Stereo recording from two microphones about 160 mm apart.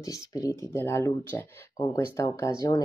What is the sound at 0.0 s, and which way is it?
Speech, 20° left (ahead or behind).